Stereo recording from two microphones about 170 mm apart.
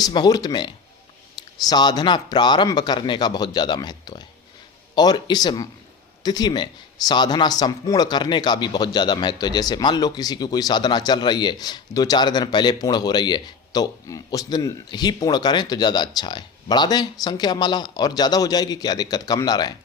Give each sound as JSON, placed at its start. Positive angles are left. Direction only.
{"t": 0.0, "sound": "a man's voice", "side_deg": 25}
{"t": 1.4, "sound": "clicking", "side_deg": 25}
{"t": 1.7, "sound": "a man's voice", "side_deg": 25}